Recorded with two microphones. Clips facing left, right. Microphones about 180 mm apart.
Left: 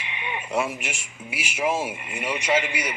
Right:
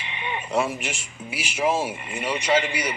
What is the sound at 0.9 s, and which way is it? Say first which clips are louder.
Speech: right 2 dB; 35° right (ahead or behind).